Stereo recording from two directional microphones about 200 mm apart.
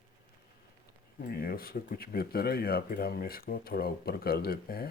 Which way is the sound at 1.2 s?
50° left (ahead or behind).